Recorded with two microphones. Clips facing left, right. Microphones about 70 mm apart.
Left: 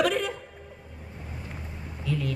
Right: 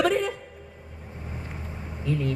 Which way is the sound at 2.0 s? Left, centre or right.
Right.